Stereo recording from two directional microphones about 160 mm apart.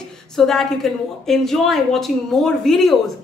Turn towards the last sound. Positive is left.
turn(degrees=0)  # may be behind; listen again after turning